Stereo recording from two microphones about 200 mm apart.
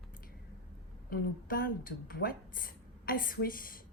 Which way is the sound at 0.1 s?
45° left (ahead or behind).